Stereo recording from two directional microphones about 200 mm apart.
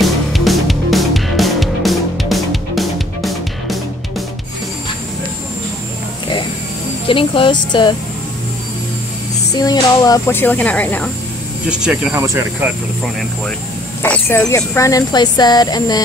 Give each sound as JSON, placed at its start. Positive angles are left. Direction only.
{"t": 0.0, "sound": "music", "side_deg": 0}
{"t": 7.1, "sound": "speech", "side_deg": 25}
{"t": 9.5, "sound": "speech", "side_deg": 20}
{"t": 11.7, "sound": "speech", "side_deg": -5}
{"t": 14.0, "sound": "speech", "side_deg": 5}